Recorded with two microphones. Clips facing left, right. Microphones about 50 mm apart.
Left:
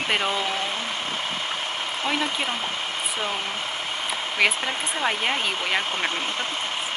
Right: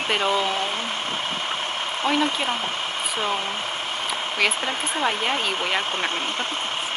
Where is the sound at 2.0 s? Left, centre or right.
Centre.